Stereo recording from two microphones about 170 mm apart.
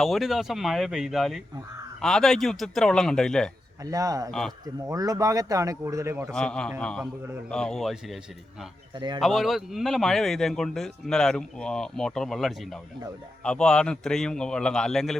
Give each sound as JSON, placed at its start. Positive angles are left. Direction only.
{"t": 0.0, "sound": "a man's voice", "side_deg": 0}
{"t": 3.8, "sound": "speech", "side_deg": -20}
{"t": 4.3, "sound": "a man's voice", "side_deg": 0}
{"t": 4.6, "sound": "speech", "side_deg": -20}
{"t": 6.3, "sound": "a man's voice", "side_deg": 5}
{"t": 9.0, "sound": "speech", "side_deg": -25}
{"t": 9.2, "sound": "a man's voice", "side_deg": 0}